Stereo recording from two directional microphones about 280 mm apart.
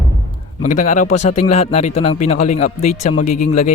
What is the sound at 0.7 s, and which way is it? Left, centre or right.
Speech, left.